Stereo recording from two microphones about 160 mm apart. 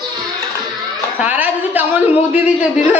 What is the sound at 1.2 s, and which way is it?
A man's voice, 10° right (ahead or behind).